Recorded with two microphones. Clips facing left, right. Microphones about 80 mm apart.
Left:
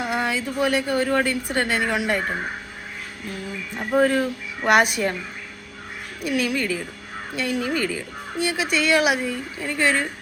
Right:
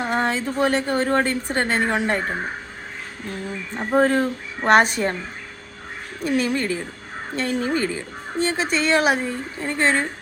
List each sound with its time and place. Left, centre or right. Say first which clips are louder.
0.0 s speech: right 2 dB; right
3.7 s speech: right 1 dB; right
6.2 s speech: right 2 dB; right